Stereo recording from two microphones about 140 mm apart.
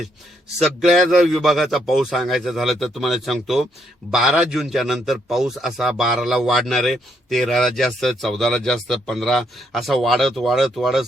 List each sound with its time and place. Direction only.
0.6 s a man's voice: centre (ahead or behind)